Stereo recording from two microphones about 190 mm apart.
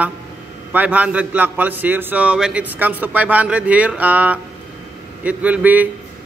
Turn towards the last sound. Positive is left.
turn(degrees=-10)  # may be behind; listen again after turning